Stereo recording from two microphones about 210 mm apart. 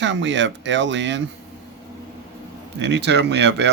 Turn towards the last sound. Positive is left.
turn(degrees=-55)  # may be behind; listen again after turning